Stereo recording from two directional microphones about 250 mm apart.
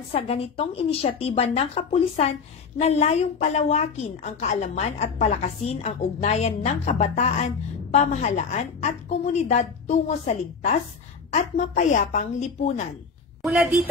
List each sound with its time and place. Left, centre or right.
0.1 s a woman's voice: left
13.4 s a woman's voice: centre